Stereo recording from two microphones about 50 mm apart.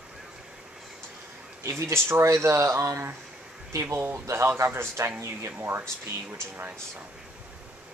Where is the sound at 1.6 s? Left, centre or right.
Right.